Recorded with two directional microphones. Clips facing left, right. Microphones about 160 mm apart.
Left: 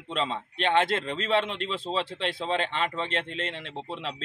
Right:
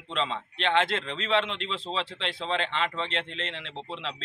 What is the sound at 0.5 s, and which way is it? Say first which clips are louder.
A man's voice: left 2 dB; 45° left (ahead or behind).